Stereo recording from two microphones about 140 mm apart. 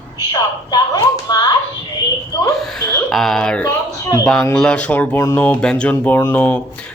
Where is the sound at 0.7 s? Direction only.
30° left (ahead or behind).